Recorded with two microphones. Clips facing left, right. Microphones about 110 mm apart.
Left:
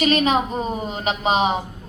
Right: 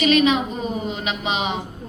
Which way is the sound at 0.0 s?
40° left (ahead or behind).